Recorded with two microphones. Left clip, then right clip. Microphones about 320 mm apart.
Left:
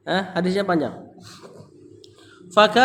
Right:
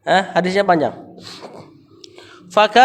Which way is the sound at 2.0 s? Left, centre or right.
Centre.